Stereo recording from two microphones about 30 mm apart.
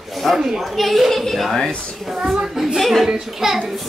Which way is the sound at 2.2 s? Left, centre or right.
Right.